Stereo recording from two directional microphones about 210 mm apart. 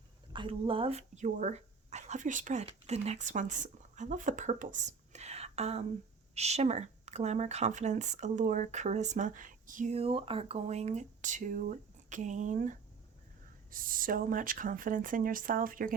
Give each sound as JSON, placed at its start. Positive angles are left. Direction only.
{"t": 0.3, "sound": "speech", "side_deg": -25}